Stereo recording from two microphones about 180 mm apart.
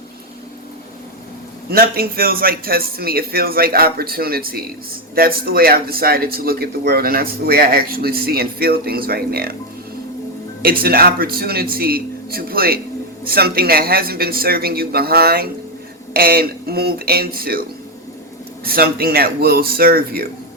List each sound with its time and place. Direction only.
1.7 s speech: 55° right (ahead or behind)
10.6 s speech: 55° right (ahead or behind)
18.6 s speech: 55° right (ahead or behind)